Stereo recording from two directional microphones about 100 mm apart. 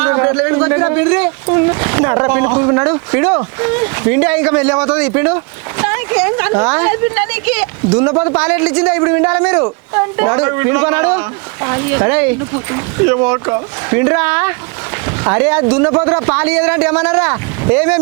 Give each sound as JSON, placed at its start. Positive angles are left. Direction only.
{"t": 0.0, "sound": "speech", "side_deg": -25}
{"t": 9.9, "sound": "speech", "side_deg": -30}